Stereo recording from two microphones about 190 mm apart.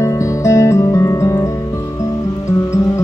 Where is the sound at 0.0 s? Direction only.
15° left (ahead or behind).